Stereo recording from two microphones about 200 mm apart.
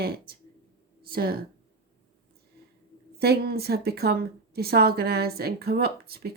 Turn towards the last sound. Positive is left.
turn(degrees=-50)  # may be behind; listen again after turning